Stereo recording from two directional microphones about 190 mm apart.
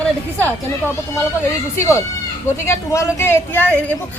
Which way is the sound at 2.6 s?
15° left (ahead or behind).